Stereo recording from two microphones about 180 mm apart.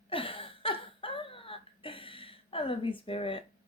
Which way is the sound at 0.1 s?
30° left (ahead or behind).